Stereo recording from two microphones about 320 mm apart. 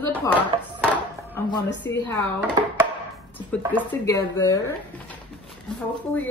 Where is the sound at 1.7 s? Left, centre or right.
Left.